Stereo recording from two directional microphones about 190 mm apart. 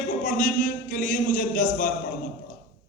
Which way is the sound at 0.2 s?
45° left (ahead or behind).